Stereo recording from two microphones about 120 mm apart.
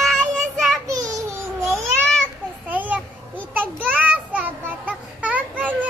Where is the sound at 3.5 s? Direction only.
15° right (ahead or behind).